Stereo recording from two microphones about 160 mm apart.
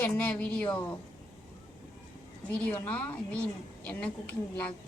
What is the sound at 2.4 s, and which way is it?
A woman's voice, 10° left (ahead or behind).